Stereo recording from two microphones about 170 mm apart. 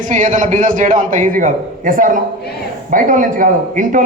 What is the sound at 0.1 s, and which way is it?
A man's voice, 50° right (ahead or behind).